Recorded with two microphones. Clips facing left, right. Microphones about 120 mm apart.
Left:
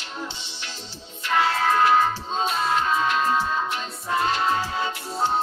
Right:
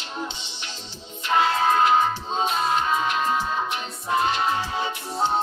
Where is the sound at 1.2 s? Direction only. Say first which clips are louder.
Right 1 dB; 20° right (ahead or behind).